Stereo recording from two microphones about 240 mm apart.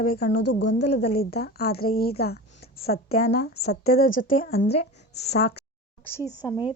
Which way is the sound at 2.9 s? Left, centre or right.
Left.